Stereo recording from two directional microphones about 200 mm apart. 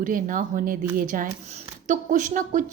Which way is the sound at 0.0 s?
40° right (ahead or behind).